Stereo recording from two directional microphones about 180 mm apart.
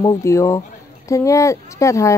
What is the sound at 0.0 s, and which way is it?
A woman's voice, 20° left (ahead or behind).